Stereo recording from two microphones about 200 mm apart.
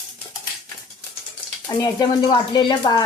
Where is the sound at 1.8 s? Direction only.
20° left (ahead or behind).